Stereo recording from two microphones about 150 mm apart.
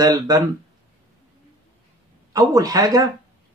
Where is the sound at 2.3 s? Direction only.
25° right (ahead or behind).